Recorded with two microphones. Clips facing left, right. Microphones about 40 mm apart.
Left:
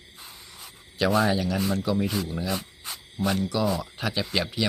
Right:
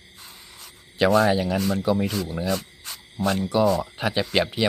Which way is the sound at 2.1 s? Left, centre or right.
Centre.